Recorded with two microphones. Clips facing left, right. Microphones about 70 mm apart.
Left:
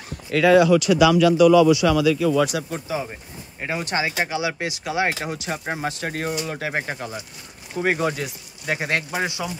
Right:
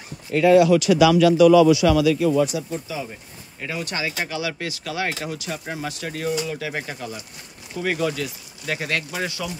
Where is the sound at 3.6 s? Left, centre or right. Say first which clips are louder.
Left 3 dB; left.